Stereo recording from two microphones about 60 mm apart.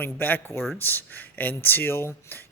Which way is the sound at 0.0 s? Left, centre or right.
Left.